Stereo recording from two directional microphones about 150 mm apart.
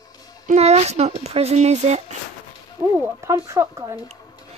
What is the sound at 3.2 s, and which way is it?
Speech, 20° right (ahead or behind).